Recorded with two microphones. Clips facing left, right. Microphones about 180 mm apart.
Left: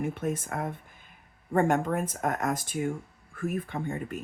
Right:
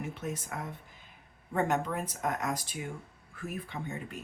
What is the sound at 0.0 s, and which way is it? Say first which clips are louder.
Speech: left 7 dB; 50° left (ahead or behind).